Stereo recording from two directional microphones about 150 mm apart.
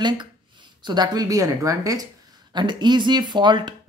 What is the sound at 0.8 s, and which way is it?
Speech, 30° right (ahead or behind).